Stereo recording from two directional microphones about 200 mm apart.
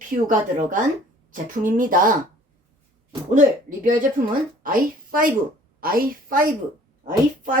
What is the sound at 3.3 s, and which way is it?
A woman's voice, 40° right (ahead or behind).